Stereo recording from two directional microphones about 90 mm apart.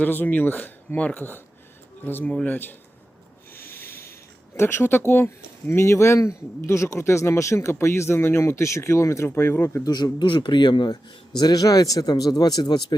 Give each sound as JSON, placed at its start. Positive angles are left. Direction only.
{"t": 0.0, "sound": "speech", "side_deg": 20}
{"t": 3.5, "sound": "snort", "side_deg": 25}
{"t": 4.5, "sound": "speech", "side_deg": 25}
{"t": 9.8, "sound": "a man's voice", "side_deg": 50}
{"t": 11.3, "sound": "speech", "side_deg": 45}